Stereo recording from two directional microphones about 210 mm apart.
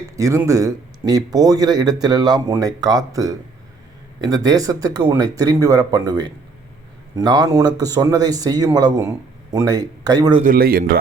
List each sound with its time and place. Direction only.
0.2 s speech: 15° right (ahead or behind)
10.4 s a man's voice: 45° right (ahead or behind)